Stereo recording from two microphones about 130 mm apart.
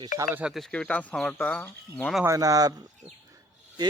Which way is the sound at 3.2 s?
25° right (ahead or behind).